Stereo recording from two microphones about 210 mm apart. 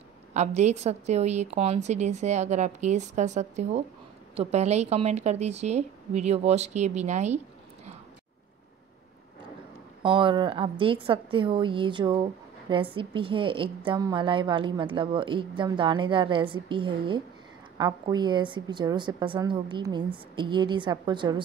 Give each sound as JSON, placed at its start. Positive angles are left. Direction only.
{"t": 0.3, "sound": "a woman's voice", "side_deg": -35}
{"t": 10.0, "sound": "a woman's voice", "side_deg": -25}